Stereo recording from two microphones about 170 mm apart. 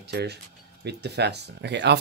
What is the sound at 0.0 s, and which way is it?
Speech, 75° right (ahead or behind).